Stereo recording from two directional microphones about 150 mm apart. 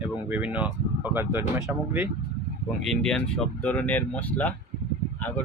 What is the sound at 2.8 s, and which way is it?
Speech, 5° left (ahead or behind).